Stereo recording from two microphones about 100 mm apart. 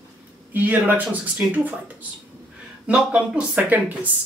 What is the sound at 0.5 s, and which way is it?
Speech, 20° right (ahead or behind).